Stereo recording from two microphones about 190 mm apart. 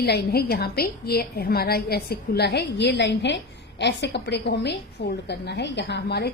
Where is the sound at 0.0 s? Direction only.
55° left (ahead or behind).